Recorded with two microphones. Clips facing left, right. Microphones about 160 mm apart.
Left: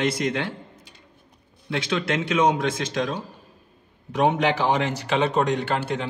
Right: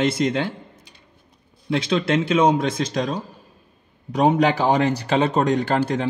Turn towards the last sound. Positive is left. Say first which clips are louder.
# right 5 dB
turn(degrees=-35)  # may be behind; listen again after turning